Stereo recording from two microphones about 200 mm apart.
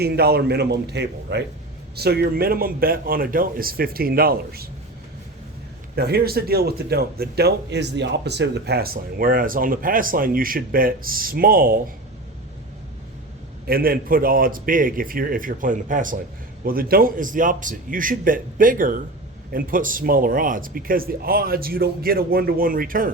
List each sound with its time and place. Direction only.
0.0 s a man's voice: 50° right (ahead or behind)
6.0 s speech: 50° right (ahead or behind)
13.7 s speech: 45° right (ahead or behind)